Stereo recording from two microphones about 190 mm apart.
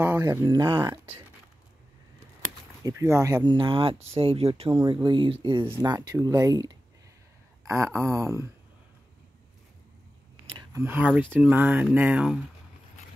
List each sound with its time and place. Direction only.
0.0 s speech: 15° right (ahead or behind)
2.8 s speech: 15° right (ahead or behind)
10.7 s speech: 10° right (ahead or behind)